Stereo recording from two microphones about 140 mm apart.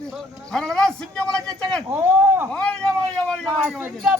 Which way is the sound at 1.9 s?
15° right (ahead or behind).